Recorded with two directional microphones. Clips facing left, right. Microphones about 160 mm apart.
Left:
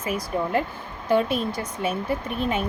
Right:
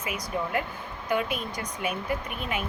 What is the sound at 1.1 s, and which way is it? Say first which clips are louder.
Speech: left 7 dB; 30° left (ahead or behind).